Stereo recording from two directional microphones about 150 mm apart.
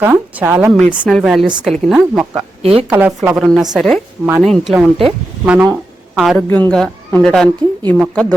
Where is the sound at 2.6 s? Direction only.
40° right (ahead or behind).